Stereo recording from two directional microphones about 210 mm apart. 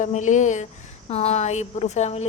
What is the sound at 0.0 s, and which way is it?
A woman's voice, 35° left (ahead or behind).